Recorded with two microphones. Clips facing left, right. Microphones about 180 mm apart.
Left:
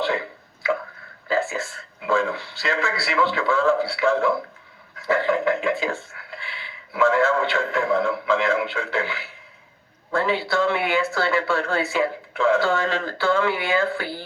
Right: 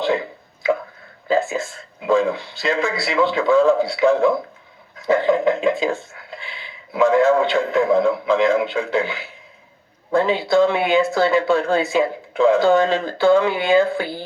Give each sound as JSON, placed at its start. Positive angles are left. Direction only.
{"t": 0.6, "sound": "drip", "side_deg": -20}
{"t": 1.3, "sound": "a man's voice", "side_deg": -20}